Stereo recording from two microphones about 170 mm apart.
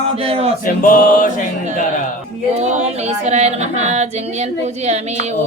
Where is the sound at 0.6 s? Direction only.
55° left (ahead or behind).